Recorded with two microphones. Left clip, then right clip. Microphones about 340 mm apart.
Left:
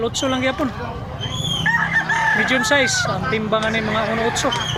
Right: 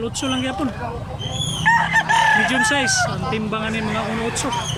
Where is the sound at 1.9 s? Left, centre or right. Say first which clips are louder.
Right 2 dB; right.